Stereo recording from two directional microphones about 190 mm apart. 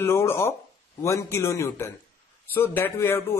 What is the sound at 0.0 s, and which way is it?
Speech, 15° left (ahead or behind).